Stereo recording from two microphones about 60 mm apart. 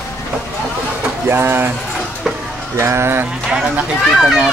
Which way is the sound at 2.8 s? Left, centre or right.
Right.